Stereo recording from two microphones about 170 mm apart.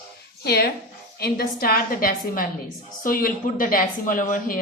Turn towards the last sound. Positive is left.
turn(degrees=55)  # may be behind; listen again after turning